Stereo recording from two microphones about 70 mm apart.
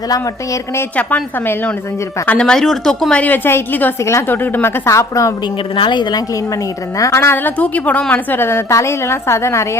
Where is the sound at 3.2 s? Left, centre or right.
Left.